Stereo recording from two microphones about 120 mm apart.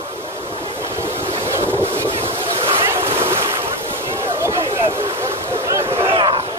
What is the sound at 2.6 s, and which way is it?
Boat, 50° right (ahead or behind).